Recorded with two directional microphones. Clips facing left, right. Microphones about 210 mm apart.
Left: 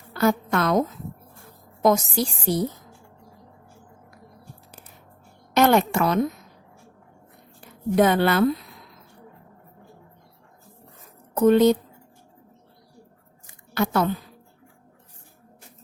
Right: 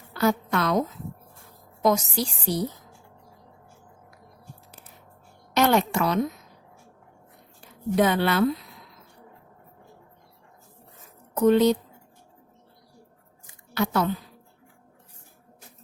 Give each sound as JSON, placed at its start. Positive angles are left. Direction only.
{"t": 0.1, "sound": "a woman's voice", "side_deg": 50}
{"t": 5.5, "sound": "a sound", "side_deg": 50}
{"t": 7.9, "sound": "a woman's voice", "side_deg": 50}
{"t": 11.3, "sound": "a woman's voice", "side_deg": 50}
{"t": 13.7, "sound": "a woman's voice", "side_deg": 50}